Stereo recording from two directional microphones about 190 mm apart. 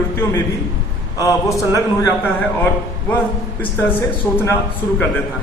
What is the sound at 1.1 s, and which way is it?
A man's voice, 15° left (ahead or behind).